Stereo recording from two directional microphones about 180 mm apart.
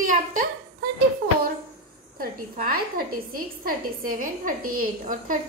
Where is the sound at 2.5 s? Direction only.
55° right (ahead or behind).